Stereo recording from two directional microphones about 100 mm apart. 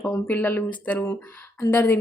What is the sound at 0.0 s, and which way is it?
A woman's voice, 20° left (ahead or behind).